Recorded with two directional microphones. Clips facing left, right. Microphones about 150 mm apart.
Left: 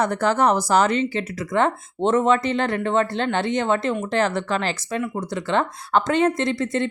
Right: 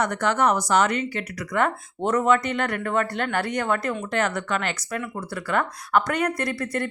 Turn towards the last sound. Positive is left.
turn(degrees=20)  # may be behind; listen again after turning